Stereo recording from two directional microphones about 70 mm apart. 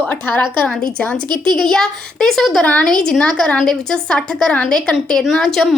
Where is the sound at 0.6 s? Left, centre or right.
Centre.